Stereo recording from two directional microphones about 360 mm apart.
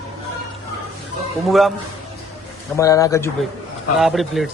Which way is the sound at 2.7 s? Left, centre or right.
Centre.